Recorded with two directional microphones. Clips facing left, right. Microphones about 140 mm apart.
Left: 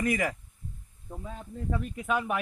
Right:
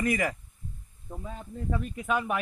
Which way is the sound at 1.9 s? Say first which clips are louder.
Right 1 dB; 5° left (ahead or behind).